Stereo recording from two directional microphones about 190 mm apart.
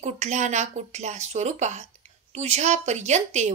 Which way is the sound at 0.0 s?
40° right (ahead or behind).